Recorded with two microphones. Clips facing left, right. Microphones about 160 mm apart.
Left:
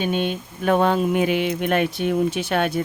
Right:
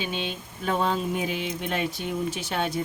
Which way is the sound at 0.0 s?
55° left (ahead or behind).